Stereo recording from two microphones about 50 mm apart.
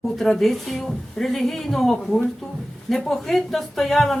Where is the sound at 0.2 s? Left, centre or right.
Centre.